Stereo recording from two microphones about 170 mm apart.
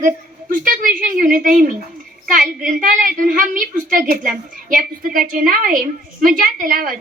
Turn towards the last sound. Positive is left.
turn(degrees=-55)  # may be behind; listen again after turning